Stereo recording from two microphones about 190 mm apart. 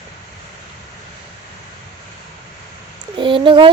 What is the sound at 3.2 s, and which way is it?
Speech, 25° right (ahead or behind).